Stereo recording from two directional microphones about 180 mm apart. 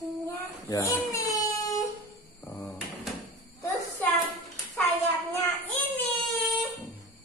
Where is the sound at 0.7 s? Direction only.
20° left (ahead or behind).